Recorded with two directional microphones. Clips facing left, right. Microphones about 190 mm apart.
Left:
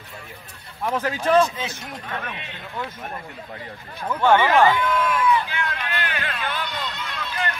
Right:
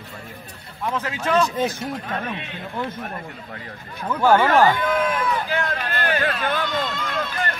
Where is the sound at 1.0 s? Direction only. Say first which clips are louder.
Left 3 dB; 35° left (ahead or behind).